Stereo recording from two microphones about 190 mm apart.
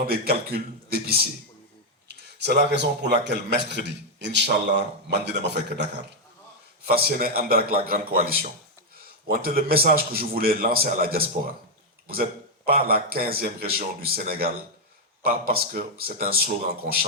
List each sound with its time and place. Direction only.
0.1 s a man's voice: 55° right (ahead or behind)
6.8 s a man's voice: 55° right (ahead or behind)
12.6 s a man's voice: 55° right (ahead or behind)